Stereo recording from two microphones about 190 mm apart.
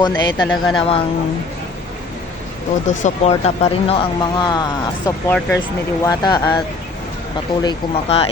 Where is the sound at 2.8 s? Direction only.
35° left (ahead or behind).